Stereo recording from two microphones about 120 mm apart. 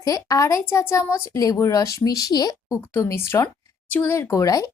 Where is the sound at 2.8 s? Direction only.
20° left (ahead or behind).